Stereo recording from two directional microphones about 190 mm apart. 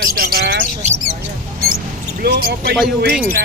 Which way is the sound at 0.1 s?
50° right (ahead or behind).